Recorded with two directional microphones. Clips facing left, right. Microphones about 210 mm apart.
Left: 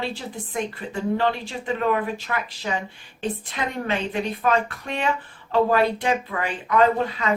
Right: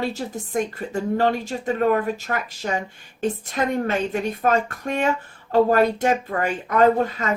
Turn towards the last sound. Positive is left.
turn(degrees=-45)  # may be behind; listen again after turning